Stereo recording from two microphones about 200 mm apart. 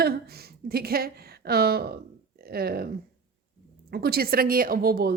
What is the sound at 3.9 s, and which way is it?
Speech, 50° right (ahead or behind).